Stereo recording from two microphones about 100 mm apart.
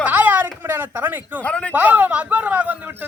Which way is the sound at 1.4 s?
15° left (ahead or behind).